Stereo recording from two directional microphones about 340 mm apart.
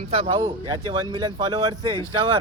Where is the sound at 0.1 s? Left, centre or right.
Centre.